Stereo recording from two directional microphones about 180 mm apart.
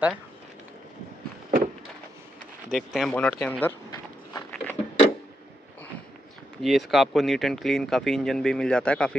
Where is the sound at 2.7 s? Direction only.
Centre (ahead or behind).